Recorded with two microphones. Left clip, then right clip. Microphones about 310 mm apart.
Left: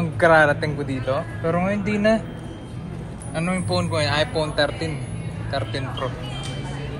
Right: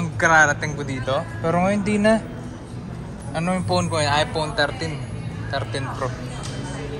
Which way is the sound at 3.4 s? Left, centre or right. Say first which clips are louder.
Right 2 dB; centre.